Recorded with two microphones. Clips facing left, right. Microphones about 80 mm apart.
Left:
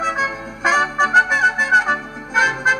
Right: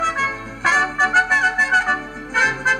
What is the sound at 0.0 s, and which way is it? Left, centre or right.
Music, centre.